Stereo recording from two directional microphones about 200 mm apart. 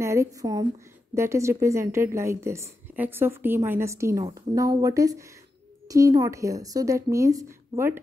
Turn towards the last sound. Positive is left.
turn(degrees=-15)  # may be behind; listen again after turning